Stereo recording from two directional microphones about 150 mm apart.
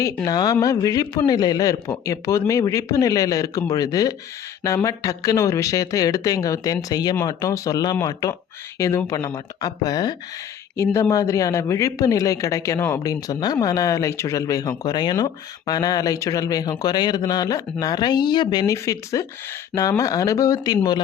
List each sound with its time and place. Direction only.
0.3 s a man's voice: 25° left (ahead or behind)